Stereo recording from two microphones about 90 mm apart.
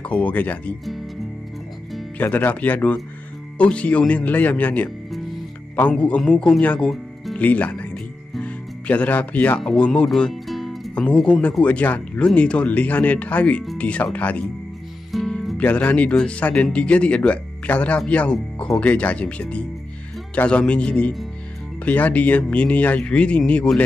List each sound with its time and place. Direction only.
0.0 s speech: 15° left (ahead or behind)
2.1 s speech: 20° left (ahead or behind)
5.1 s music: centre (ahead or behind)
5.8 s speech: 15° left (ahead or behind)
7.3 s music: 15° left (ahead or behind)
9.6 s speech: 10° left (ahead or behind)
10.0 s music: 5° left (ahead or behind)
11.0 s speech: 10° left (ahead or behind)
15.0 s speech: 5° left (ahead or behind)